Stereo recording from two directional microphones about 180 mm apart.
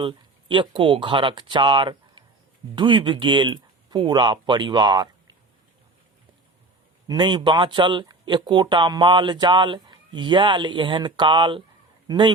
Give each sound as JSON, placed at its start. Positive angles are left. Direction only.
{"t": 0.0, "sound": "speech", "side_deg": -30}
{"t": 7.1, "sound": "speech", "side_deg": -25}